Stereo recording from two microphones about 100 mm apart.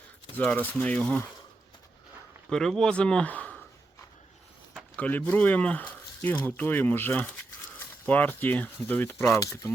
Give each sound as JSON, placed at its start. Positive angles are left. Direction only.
{"t": 0.3, "sound": "speech", "side_deg": 15}
{"t": 2.5, "sound": "speech", "side_deg": 5}
{"t": 4.9, "sound": "speech", "side_deg": 15}